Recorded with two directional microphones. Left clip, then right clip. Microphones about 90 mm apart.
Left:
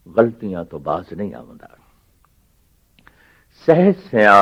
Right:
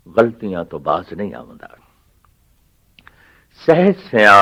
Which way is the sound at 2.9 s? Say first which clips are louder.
Right 4 dB; 35° left (ahead or behind).